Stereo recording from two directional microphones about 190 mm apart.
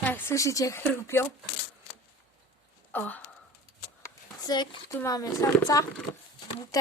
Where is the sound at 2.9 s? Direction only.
10° left (ahead or behind).